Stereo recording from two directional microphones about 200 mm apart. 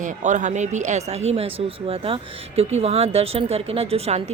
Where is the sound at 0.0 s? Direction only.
40° right (ahead or behind).